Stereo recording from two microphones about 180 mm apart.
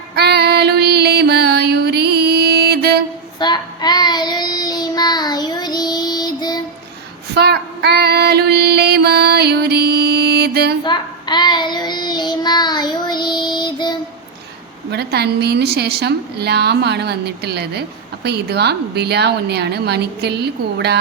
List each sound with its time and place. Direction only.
0.2 s female singing: 65° right (ahead or behind)
3.3 s child singing: 25° left (ahead or behind)
7.3 s child singing: 65° right (ahead or behind)
10.8 s child singing: 25° left (ahead or behind)
14.8 s a woman's voice: 65° right (ahead or behind)